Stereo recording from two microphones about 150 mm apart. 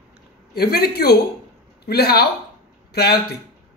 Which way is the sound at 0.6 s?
90° left.